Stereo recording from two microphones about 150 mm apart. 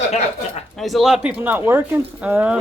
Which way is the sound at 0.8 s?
Centre (ahead or behind).